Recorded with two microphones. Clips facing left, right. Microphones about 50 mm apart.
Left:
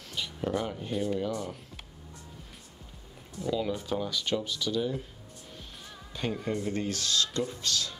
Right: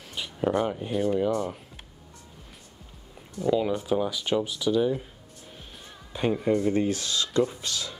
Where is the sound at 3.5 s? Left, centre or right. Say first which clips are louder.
Right 6 dB; right.